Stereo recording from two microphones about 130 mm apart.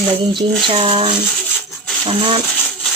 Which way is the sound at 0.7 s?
45° right (ahead or behind).